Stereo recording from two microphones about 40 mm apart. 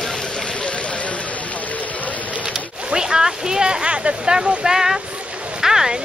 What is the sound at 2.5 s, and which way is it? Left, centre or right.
Splash, centre.